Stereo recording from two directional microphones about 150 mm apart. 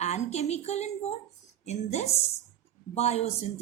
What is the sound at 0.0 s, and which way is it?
A woman's voice, 50° left (ahead or behind).